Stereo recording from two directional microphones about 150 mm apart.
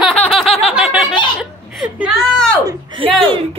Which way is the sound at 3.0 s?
35° right (ahead or behind).